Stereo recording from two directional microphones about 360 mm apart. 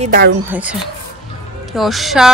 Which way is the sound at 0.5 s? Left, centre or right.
Centre.